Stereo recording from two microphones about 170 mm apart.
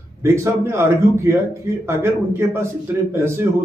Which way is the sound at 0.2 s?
15° right (ahead or behind).